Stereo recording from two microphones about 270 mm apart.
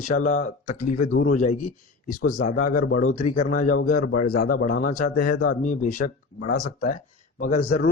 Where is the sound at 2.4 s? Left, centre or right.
Left.